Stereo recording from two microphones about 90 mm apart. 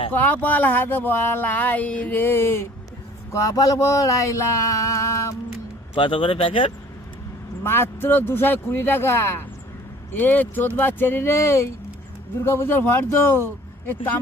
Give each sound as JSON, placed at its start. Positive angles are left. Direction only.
{"t": 0.1, "sound": "speech", "side_deg": 20}
{"t": 3.3, "sound": "a sound", "side_deg": 40}
{"t": 5.9, "sound": "speech", "side_deg": 70}
{"t": 7.6, "sound": "speech", "side_deg": 25}